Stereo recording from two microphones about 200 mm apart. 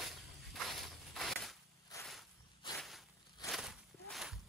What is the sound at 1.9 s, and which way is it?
Insect, 20° left (ahead or behind).